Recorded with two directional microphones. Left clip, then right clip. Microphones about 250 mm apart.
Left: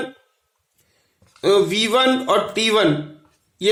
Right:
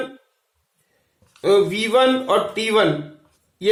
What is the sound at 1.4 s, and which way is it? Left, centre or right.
A man's voice, left.